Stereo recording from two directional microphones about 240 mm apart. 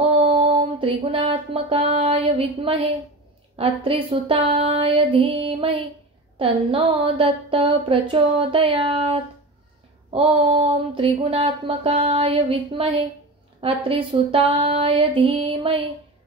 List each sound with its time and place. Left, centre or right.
0.2 s music: right
3.5 s a woman's voice: right